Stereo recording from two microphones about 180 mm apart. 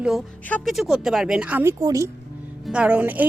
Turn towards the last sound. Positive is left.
turn(degrees=-10)  # may be behind; listen again after turning